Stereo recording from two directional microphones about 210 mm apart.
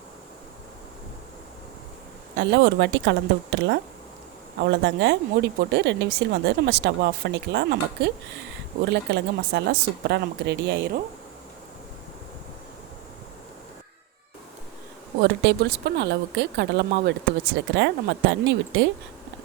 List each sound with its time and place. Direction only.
2.3 s speech: 55° right (ahead or behind)
15.2 s speech: 55° right (ahead or behind)